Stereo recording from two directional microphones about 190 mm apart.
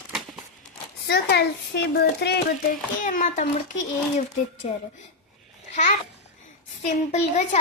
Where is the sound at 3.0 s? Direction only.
40° left (ahead or behind).